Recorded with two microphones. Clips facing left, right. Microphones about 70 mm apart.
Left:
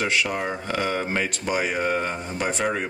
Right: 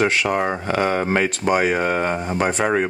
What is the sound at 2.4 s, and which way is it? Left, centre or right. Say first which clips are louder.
Speech: right 5 dB; right.